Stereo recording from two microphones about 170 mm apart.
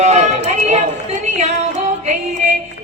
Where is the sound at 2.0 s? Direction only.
45° right (ahead or behind).